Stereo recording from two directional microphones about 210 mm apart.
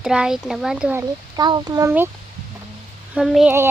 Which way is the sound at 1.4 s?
20° right (ahead or behind).